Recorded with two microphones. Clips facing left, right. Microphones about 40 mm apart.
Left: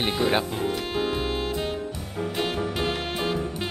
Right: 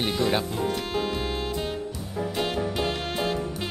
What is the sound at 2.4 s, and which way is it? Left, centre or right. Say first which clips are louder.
Music: even; centre.